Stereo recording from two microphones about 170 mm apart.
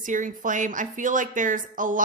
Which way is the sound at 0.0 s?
50° right (ahead or behind).